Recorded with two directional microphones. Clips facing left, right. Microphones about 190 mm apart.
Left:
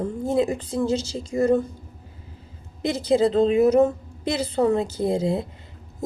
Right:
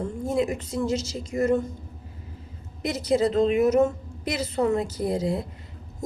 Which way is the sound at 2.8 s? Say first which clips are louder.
Left 3 dB; 30° left (ahead or behind).